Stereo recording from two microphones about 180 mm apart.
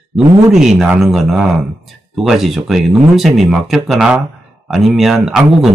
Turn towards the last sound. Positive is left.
turn(degrees=0)  # may be behind; listen again after turning